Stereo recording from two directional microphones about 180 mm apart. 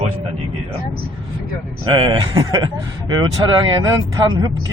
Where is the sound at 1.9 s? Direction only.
25° right (ahead or behind).